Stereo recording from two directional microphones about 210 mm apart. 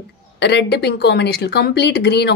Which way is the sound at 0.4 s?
55° left (ahead or behind).